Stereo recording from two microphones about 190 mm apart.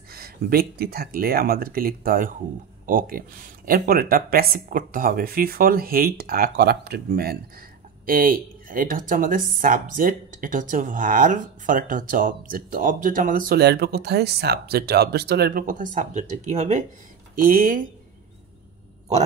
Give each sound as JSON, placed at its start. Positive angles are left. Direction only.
{"t": 0.1, "sound": "speech", "side_deg": -50}
{"t": 17.4, "sound": "speech", "side_deg": -50}